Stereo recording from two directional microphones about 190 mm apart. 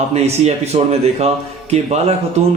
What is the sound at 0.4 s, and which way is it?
Speech, 35° right (ahead or behind).